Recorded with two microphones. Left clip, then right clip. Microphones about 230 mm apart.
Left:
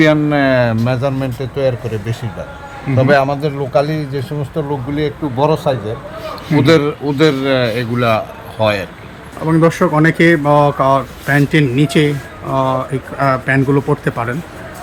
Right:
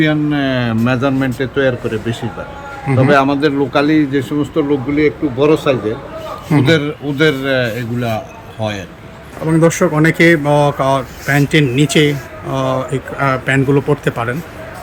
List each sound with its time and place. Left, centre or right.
0.0 s speech: centre
1.0 s a man's voice: left
6.7 s speech: centre
9.5 s speech: centre